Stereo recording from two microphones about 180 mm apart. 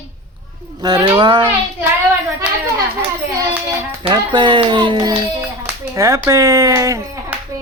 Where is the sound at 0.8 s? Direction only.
20° right (ahead or behind).